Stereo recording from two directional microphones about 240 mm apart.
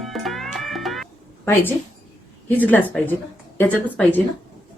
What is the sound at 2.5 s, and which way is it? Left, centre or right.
A woman's voice, centre.